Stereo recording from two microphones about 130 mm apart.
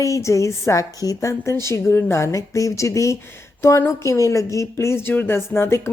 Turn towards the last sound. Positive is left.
turn(degrees=20)  # may be behind; listen again after turning